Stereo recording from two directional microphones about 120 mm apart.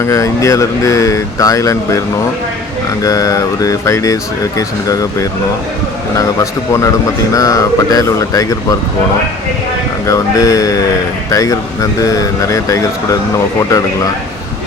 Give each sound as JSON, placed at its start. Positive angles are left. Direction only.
{"t": 0.0, "sound": "speech", "side_deg": 25}
{"t": 3.0, "sound": "speech", "side_deg": 30}
{"t": 10.1, "sound": "speech", "side_deg": 30}